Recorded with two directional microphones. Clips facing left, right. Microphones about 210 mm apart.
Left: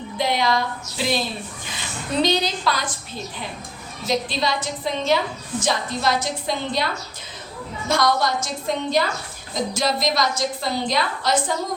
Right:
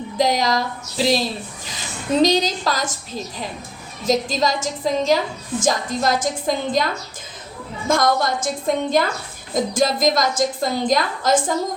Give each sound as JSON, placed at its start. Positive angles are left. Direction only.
{"t": 0.2, "sound": "a woman's voice", "side_deg": -40}
{"t": 7.9, "sound": "a woman's voice", "side_deg": -50}